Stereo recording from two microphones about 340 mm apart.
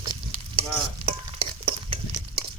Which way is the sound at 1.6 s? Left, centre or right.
Centre.